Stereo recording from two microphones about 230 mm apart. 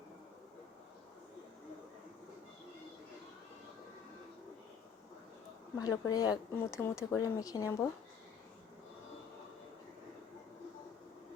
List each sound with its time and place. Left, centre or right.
5.8 s speech: centre